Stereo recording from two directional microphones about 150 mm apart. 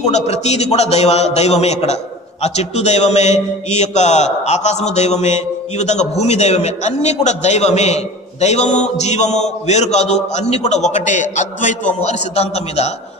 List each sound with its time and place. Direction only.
0.0 s a man's voice: 45° left (ahead or behind)